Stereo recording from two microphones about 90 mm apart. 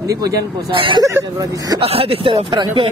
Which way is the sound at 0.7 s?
70° right (ahead or behind).